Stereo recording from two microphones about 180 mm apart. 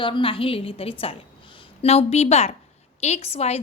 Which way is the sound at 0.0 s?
30° left (ahead or behind).